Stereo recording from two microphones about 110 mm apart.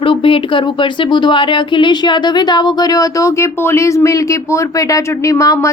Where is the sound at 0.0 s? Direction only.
55° left (ahead or behind).